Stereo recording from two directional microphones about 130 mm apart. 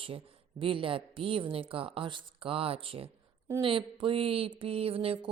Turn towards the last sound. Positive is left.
turn(degrees=-45)  # may be behind; listen again after turning